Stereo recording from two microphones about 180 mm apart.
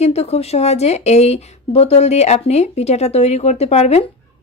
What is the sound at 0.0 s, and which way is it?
Speech, 35° left (ahead or behind).